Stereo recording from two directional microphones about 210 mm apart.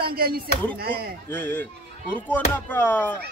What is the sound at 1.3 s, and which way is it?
Speech, 10° left (ahead or behind).